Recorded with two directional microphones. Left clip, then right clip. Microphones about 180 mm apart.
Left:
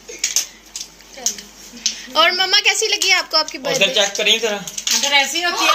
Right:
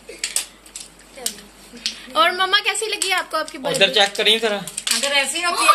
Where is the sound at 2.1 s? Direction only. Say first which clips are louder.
Left 2 dB; centre (ahead or behind).